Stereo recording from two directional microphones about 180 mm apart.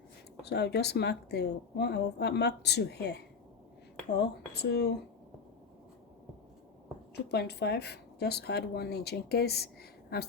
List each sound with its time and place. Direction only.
0.4 s a woman's voice: 65° left (ahead or behind)
7.3 s speech: 65° left (ahead or behind)